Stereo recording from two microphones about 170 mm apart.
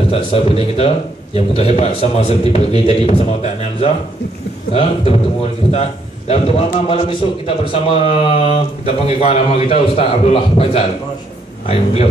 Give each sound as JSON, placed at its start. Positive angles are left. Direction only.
{"t": 0.1, "sound": "a man's voice", "side_deg": 35}